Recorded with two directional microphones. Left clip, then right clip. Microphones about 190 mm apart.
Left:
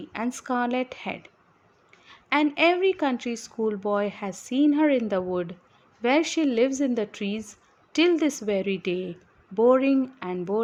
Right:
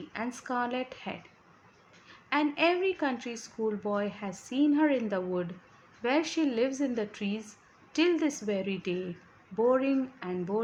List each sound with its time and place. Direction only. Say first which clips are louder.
0.1 s a woman's voice: left 6 dB; 45° left (ahead or behind)